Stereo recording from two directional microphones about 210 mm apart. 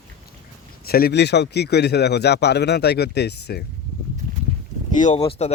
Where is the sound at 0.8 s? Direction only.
45° left (ahead or behind).